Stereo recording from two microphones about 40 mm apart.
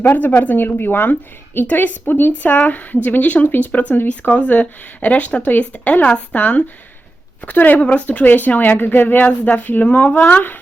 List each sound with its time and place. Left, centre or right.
0.0 s speech: left
2.4 s speech: left
3.4 s speech: left
3.7 s a woman's voice: left